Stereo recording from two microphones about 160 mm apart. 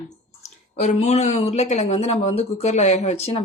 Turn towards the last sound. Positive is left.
turn(degrees=40)  # may be behind; listen again after turning